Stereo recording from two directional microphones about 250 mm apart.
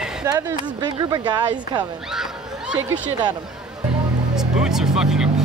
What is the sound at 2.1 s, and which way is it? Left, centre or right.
Speech, centre.